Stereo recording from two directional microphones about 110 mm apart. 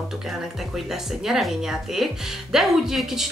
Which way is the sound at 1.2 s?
5° right (ahead or behind).